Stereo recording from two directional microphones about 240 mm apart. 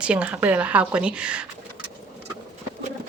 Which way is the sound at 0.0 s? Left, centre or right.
Centre.